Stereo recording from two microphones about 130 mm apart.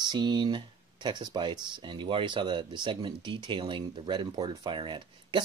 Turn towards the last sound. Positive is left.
turn(degrees=-40)  # may be behind; listen again after turning